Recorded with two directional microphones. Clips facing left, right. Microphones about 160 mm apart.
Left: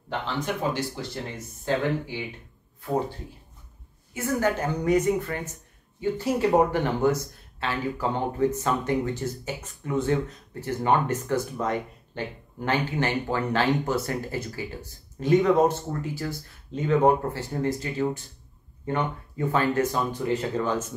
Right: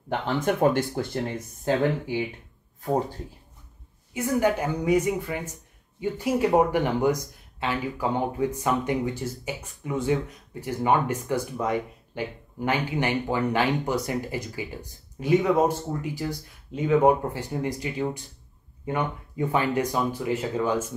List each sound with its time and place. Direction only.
0.5 s speech: 55° right (ahead or behind)
4.1 s speech: 15° right (ahead or behind)